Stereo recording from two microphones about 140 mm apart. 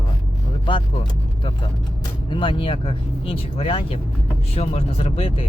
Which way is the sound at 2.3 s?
35° left (ahead or behind).